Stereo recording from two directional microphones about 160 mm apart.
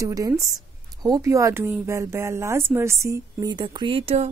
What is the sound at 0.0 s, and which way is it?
A woman's voice, 20° right (ahead or behind).